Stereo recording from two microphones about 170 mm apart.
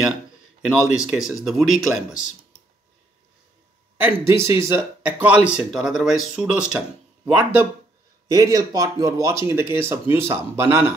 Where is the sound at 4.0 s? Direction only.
15° right (ahead or behind).